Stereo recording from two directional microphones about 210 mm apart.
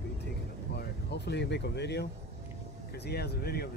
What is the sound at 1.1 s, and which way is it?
Speech, 55° left (ahead or behind).